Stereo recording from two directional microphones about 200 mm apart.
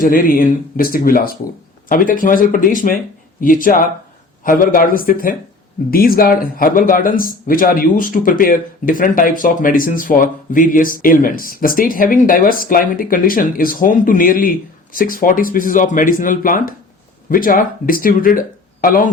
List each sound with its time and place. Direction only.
0.0 s speech: 45° left (ahead or behind)